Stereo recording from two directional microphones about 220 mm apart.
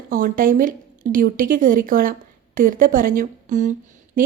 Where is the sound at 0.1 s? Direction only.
40° right (ahead or behind).